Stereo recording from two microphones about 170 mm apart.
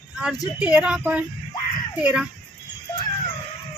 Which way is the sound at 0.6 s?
10° right (ahead or behind).